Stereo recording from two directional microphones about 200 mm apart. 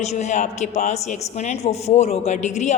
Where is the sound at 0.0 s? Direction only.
35° left (ahead or behind).